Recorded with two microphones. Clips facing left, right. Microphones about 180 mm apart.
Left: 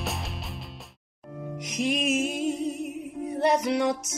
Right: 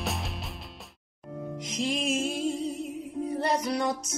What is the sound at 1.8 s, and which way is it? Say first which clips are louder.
Music: left 3 dB; 20° left (ahead or behind).